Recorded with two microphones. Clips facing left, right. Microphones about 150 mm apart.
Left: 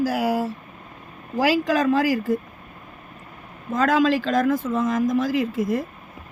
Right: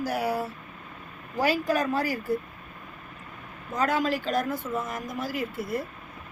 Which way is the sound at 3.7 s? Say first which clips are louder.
Left 7 dB; 90° left.